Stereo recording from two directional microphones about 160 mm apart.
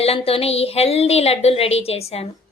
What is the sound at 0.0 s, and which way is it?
Speech, 40° left (ahead or behind).